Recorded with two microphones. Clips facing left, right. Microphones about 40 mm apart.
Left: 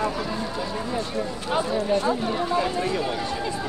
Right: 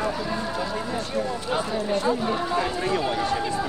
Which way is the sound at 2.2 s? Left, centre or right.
Right.